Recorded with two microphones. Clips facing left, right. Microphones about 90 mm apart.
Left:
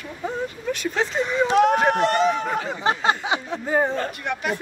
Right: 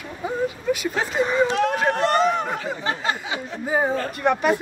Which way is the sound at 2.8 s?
20° left (ahead or behind).